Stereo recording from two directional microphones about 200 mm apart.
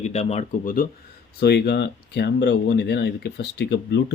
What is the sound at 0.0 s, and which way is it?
Speech, 30° left (ahead or behind).